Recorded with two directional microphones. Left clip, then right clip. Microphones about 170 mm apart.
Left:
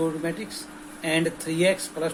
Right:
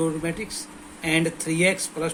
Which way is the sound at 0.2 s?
60° right (ahead or behind).